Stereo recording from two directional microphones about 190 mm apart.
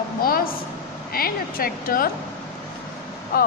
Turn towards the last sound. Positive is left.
turn(degrees=55)  # may be behind; listen again after turning